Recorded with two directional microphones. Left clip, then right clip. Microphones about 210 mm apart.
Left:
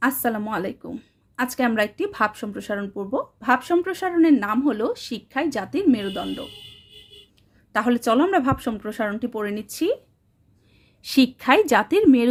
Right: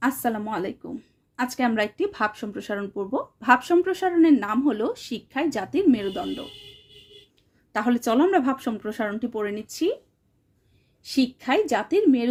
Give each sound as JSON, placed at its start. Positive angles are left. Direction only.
{"t": 0.0, "sound": "a woman's voice", "side_deg": 5}
{"t": 7.7, "sound": "a woman's voice", "side_deg": 10}
{"t": 11.0, "sound": "a woman's voice", "side_deg": 25}